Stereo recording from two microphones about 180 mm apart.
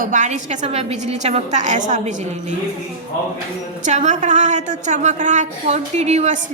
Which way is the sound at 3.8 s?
40° right (ahead or behind).